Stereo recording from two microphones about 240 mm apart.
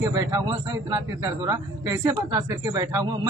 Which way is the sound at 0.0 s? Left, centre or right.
Centre.